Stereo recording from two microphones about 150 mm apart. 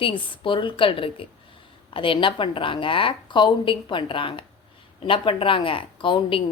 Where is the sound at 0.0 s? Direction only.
35° left (ahead or behind).